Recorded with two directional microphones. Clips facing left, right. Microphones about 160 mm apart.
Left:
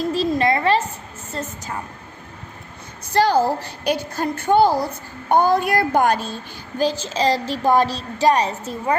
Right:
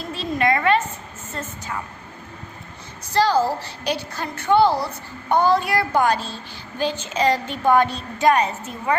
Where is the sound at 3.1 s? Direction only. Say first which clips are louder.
Left 2 dB; 55° left (ahead or behind).